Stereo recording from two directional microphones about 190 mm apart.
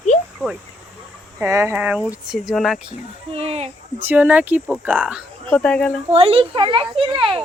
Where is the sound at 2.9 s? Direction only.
30° right (ahead or behind).